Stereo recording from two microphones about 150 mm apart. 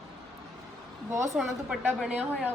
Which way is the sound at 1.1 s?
20° right (ahead or behind).